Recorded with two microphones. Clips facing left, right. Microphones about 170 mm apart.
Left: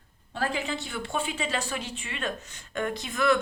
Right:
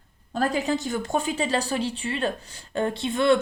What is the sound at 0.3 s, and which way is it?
Speech, 40° right (ahead or behind).